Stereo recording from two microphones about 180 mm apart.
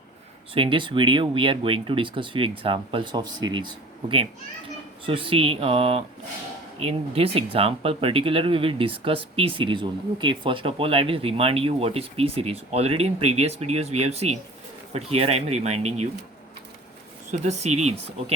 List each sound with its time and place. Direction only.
0.5 s speech: 30° right (ahead or behind)
17.4 s speech: 40° right (ahead or behind)